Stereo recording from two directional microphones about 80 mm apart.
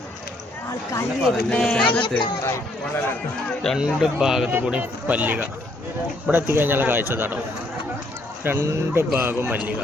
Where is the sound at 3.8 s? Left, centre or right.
Centre.